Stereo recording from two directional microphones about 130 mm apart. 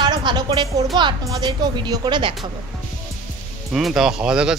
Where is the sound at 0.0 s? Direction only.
35° right (ahead or behind).